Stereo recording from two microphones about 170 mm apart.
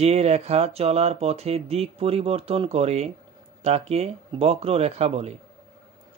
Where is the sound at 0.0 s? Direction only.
40° right (ahead or behind).